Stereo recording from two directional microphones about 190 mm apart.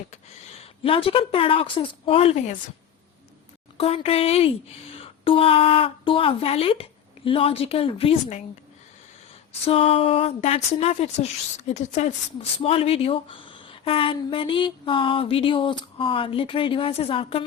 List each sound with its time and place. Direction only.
0.1 s speech: 35° left (ahead or behind)
3.8 s speech: 30° left (ahead or behind)
9.6 s speech: 30° left (ahead or behind)